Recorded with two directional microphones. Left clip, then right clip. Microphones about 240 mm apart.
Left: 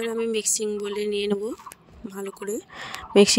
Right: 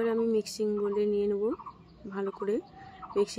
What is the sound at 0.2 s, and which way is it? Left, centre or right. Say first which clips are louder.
Speech: left 3 dB; left.